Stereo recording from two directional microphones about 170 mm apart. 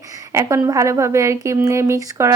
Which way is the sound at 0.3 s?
20° right (ahead or behind).